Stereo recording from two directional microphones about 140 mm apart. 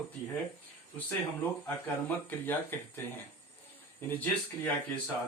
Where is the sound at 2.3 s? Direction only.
15° left (ahead or behind).